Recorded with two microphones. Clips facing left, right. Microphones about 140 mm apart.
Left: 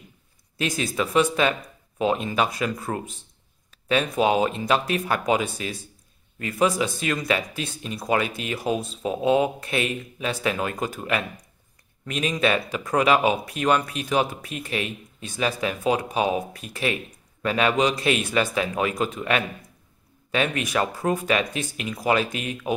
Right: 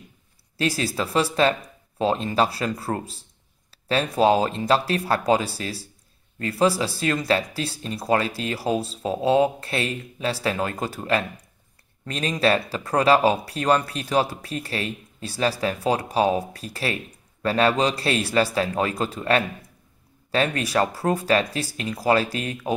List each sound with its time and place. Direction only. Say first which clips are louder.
0.6 s speech: right 1 dB; 35° right (ahead or behind)